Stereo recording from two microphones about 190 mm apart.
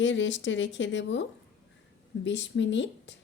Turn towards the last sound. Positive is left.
turn(degrees=70)  # may be behind; listen again after turning